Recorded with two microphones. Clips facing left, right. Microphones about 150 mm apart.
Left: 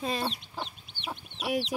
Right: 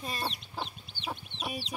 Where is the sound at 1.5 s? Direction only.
90° left.